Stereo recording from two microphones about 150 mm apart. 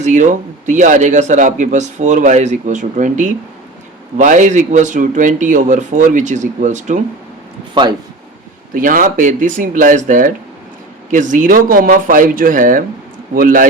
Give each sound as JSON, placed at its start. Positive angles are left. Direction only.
{"t": 0.0, "sound": "a man's voice", "side_deg": -55}
{"t": 7.7, "sound": "speech", "side_deg": -30}
{"t": 8.7, "sound": "a man's voice", "side_deg": -65}